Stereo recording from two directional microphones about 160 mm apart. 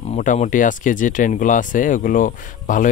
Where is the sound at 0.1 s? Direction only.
50° left (ahead or behind).